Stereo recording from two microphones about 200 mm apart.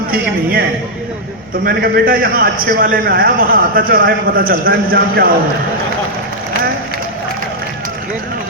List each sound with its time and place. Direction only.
1.6 s a man's voice: 45° right (ahead or behind)